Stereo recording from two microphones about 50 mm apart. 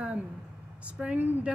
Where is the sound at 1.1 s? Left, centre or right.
Right.